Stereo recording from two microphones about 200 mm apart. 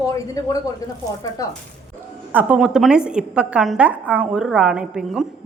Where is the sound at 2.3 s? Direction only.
10° right (ahead or behind).